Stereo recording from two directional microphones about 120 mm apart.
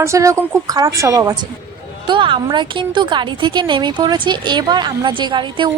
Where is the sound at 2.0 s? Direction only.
45° right (ahead or behind).